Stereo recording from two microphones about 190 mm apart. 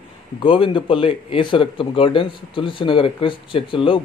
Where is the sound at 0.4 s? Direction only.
25° left (ahead or behind).